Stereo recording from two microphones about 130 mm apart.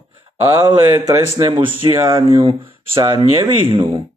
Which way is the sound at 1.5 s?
45° right (ahead or behind).